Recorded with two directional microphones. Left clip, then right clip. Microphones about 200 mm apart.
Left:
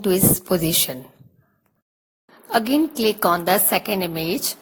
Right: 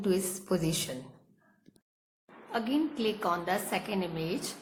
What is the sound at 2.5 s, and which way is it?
A woman's voice, 50° left (ahead or behind).